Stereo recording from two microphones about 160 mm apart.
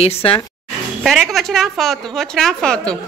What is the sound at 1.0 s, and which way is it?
A woman's voice, centre (ahead or behind).